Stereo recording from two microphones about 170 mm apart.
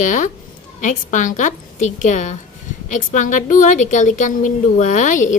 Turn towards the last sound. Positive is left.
turn(degrees=45)  # may be behind; listen again after turning